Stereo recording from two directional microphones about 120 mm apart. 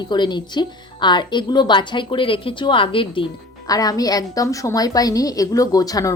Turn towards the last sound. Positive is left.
turn(degrees=30)  # may be behind; listen again after turning